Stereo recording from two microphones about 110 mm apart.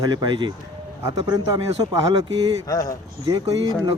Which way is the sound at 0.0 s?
40° right (ahead or behind).